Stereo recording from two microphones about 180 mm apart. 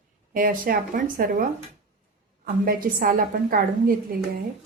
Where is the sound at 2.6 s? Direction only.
50° right (ahead or behind).